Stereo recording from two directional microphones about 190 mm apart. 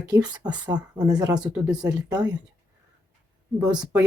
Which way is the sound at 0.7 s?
20° right (ahead or behind).